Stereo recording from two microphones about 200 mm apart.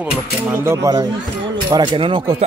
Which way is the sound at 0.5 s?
15° right (ahead or behind).